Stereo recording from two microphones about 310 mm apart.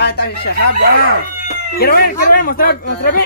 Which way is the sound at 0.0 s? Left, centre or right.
Left.